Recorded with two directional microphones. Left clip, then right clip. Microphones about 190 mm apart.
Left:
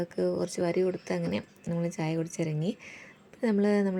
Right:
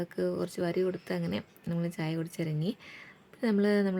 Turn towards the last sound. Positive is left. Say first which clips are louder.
# left 1 dB
turn(degrees=0)  # may be behind; listen again after turning